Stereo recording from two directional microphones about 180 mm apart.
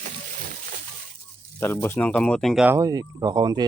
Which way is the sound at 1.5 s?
15° left (ahead or behind).